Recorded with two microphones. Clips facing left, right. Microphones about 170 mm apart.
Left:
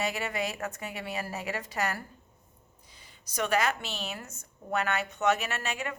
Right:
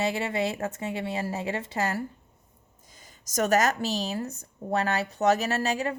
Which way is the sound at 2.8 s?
45° right (ahead or behind).